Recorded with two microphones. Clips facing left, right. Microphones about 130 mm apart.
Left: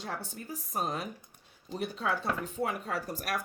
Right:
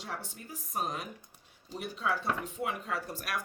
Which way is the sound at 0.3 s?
35° left (ahead or behind).